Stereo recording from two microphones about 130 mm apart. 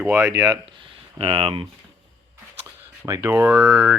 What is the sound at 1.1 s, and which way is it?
Speech, 50° right (ahead or behind).